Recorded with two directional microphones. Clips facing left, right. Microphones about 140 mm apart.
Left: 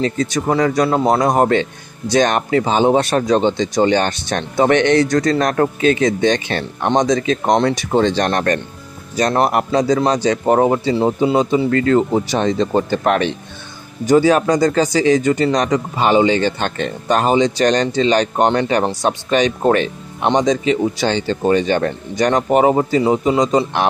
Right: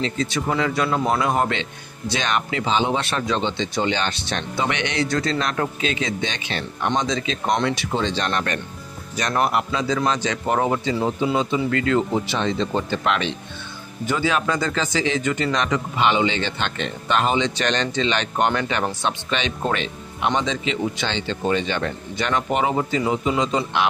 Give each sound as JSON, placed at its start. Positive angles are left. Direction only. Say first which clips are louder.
{"t": 0.0, "sound": "speech", "louder": "left 5 dB", "side_deg": 45}
{"t": 7.5, "sound": "speech", "louder": "left 5 dB", "side_deg": 35}
{"t": 7.9, "sound": "speech", "louder": "left 8 dB", "side_deg": 50}